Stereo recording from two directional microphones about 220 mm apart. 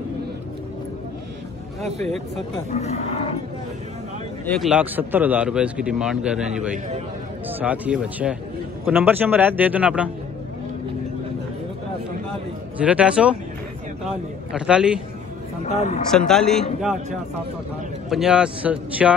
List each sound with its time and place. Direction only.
4.5 s a man's voice: centre (ahead or behind)
12.7 s a man's voice: 5° right (ahead or behind)
15.6 s speech: 30° left (ahead or behind)
16.1 s a man's voice: centre (ahead or behind)
18.1 s a man's voice: 5° right (ahead or behind)